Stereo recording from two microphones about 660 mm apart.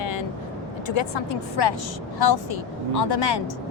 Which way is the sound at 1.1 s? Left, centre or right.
Left.